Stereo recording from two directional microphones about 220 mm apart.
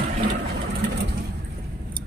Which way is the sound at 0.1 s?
30° right (ahead or behind).